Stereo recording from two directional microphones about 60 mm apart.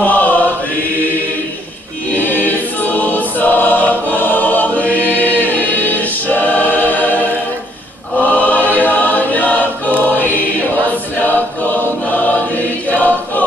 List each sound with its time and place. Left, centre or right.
0.0 s chant: left
2.1 s choir: left